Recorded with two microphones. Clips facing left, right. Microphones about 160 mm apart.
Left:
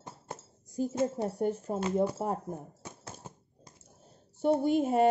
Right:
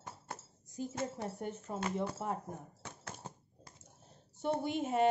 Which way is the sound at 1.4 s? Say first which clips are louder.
Left 9 dB; 35° left (ahead or behind).